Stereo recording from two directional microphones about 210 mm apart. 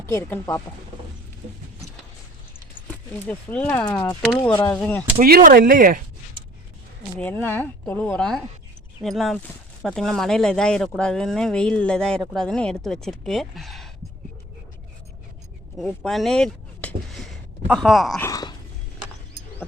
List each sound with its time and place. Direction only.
0.0 s speech: 10° left (ahead or behind)
2.8 s speech: 10° left (ahead or behind)
5.2 s speech: 40° right (ahead or behind)
7.2 s speech: 10° left (ahead or behind)
15.8 s speech: centre (ahead or behind)
18.2 s a sound: 15° left (ahead or behind)